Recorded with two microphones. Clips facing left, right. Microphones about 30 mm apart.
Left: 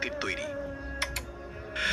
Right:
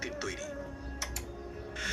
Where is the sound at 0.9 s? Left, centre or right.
Left.